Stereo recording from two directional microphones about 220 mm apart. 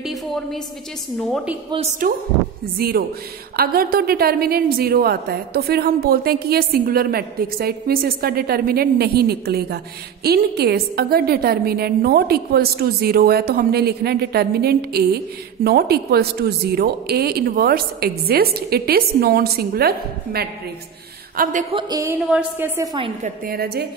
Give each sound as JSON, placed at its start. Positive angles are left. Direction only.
{"t": 0.0, "sound": "a woman's voice", "side_deg": 0}
{"t": 2.0, "sound": "a woman's voice", "side_deg": -40}
{"t": 21.7, "sound": "a woman's voice", "side_deg": -20}
{"t": 22.2, "sound": "a woman's voice", "side_deg": -5}
{"t": 23.2, "sound": "a woman's voice", "side_deg": -40}